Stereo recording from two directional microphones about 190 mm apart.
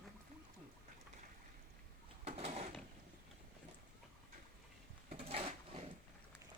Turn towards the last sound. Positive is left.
turn(degrees=-30)  # may be behind; listen again after turning